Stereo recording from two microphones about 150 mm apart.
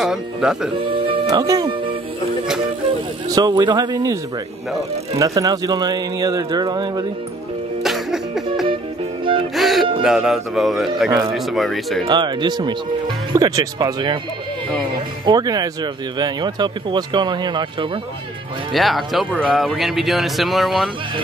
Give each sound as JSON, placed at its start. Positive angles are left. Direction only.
{"t": 0.0, "sound": "speech", "side_deg": -5}
{"t": 1.0, "sound": "music", "side_deg": -35}
{"t": 3.3, "sound": "speech", "side_deg": -25}
{"t": 7.8, "sound": "music", "side_deg": 0}
{"t": 9.6, "sound": "speech", "side_deg": 0}
{"t": 12.1, "sound": "speech", "side_deg": -30}
{"t": 15.2, "sound": "speech", "side_deg": -25}
{"t": 18.7, "sound": "speech", "side_deg": 0}